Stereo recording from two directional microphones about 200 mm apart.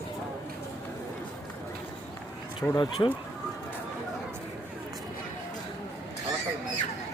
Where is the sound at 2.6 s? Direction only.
5° left (ahead or behind).